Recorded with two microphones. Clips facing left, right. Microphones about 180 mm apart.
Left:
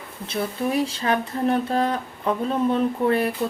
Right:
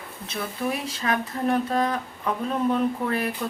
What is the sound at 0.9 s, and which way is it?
Speech, 30° left (ahead or behind).